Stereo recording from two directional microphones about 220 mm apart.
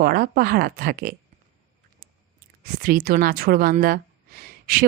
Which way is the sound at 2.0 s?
40° right (ahead or behind).